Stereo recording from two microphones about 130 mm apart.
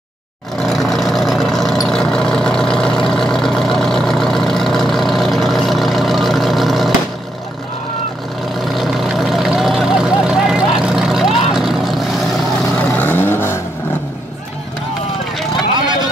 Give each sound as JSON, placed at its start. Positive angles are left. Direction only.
{"t": 0.6, "sound": "vehicle", "side_deg": 0}
{"t": 8.7, "sound": "vehicle", "side_deg": 0}
{"t": 12.7, "sound": "vehicle", "side_deg": 15}